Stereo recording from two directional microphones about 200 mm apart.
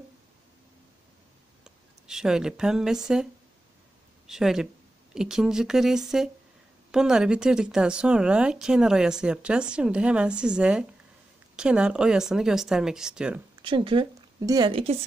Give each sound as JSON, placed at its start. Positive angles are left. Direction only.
{"t": 1.6, "sound": "speech", "side_deg": -5}
{"t": 4.3, "sound": "speech", "side_deg": 0}
{"t": 13.6, "sound": "a woman's voice", "side_deg": -25}